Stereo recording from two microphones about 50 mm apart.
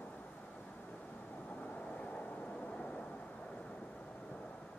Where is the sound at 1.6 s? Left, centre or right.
Left.